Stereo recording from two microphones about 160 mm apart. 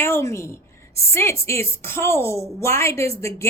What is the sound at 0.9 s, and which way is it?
A woman's voice, 15° left (ahead or behind).